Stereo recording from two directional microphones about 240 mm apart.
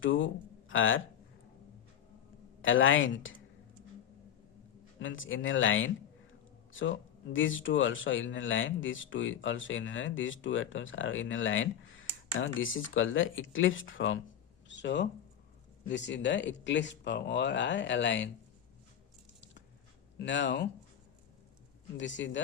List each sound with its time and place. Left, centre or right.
0.0 s speech: left
2.6 s speech: left
4.9 s speech: left
7.3 s speech: left
20.1 s speech: left
21.9 s speech: left